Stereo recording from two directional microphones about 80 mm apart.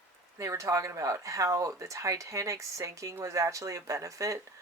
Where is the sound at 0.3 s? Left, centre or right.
Right.